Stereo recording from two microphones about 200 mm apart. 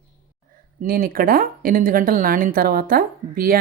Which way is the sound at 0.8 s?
45° right (ahead or behind).